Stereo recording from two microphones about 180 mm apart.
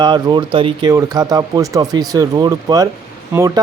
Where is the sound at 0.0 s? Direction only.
25° right (ahead or behind).